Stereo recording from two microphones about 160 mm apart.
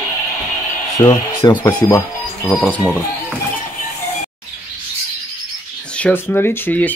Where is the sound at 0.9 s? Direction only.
25° left (ahead or behind).